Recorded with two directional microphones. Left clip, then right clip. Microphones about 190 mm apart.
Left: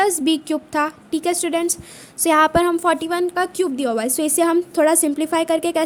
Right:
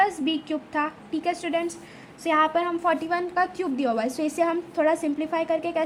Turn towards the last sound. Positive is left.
turn(degrees=60)  # may be behind; listen again after turning